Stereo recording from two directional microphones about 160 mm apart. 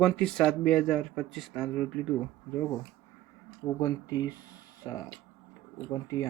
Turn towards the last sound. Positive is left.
turn(degrees=20)  # may be behind; listen again after turning